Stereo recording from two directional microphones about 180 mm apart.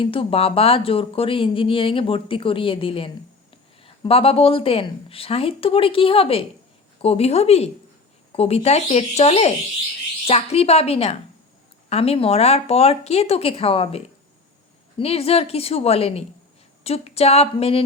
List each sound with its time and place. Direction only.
0.0 s speech: 30° left (ahead or behind)